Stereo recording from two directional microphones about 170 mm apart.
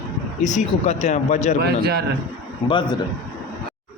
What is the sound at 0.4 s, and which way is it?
Speech, 45° left (ahead or behind).